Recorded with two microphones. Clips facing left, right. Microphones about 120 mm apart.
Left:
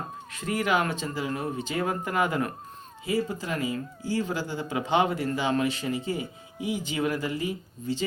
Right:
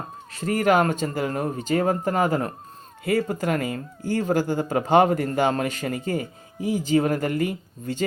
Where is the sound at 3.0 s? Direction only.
60° right (ahead or behind).